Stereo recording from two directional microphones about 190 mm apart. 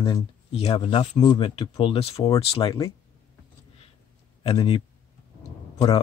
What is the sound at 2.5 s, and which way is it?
Speech, 20° left (ahead or behind).